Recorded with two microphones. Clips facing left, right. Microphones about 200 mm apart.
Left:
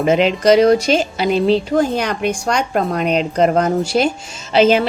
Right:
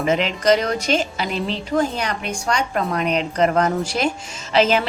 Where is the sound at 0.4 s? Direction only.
35° left (ahead or behind).